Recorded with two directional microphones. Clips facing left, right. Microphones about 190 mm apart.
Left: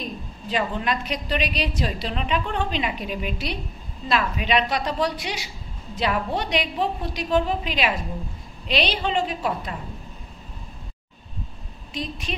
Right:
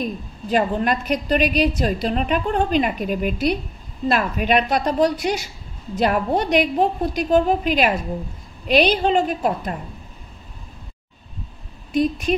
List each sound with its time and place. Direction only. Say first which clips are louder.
0.0 s a woman's voice: right 6 dB; 50° right (ahead or behind)
11.9 s a woman's voice: right 12 dB; 50° right (ahead or behind)